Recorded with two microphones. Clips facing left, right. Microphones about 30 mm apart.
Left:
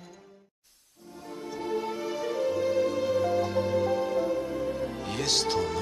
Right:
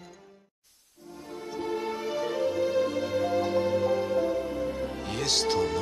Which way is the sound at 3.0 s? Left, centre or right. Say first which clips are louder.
Left 1 dB; centre.